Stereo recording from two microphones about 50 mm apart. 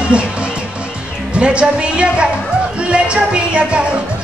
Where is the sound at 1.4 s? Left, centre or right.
Right.